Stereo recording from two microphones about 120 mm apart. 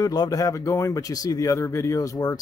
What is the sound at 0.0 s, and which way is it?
Speech, 30° left (ahead or behind).